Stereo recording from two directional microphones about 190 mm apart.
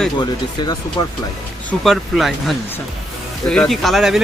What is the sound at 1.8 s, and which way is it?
Speech, centre (ahead or behind).